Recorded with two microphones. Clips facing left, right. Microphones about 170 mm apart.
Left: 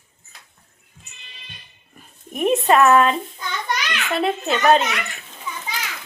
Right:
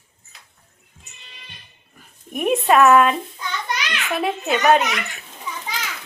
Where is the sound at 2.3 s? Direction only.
10° right (ahead or behind).